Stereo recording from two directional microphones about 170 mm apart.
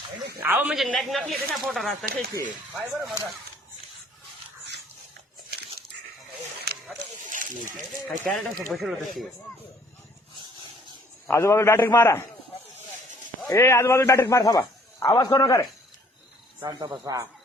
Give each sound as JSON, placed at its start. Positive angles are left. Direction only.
{"t": 0.4, "sound": "a man's voice", "side_deg": -10}
{"t": 7.3, "sound": "a sound", "side_deg": -50}
{"t": 8.3, "sound": "speech", "side_deg": 0}
{"t": 11.3, "sound": "a man's voice", "side_deg": 15}
{"t": 13.5, "sound": "a man's voice", "side_deg": 15}
{"t": 16.6, "sound": "cricket", "side_deg": -20}